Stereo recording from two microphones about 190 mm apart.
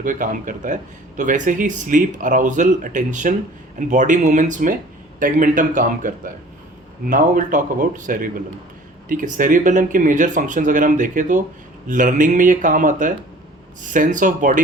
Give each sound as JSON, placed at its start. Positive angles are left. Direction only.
{"t": 0.0, "sound": "speech", "side_deg": -45}